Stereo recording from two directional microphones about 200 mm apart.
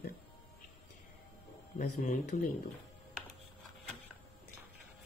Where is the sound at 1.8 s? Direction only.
45° left (ahead or behind).